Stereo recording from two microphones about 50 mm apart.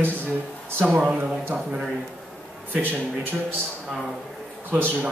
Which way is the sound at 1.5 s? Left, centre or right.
Right.